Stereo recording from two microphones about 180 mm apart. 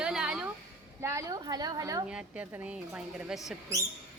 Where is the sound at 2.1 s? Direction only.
5° right (ahead or behind).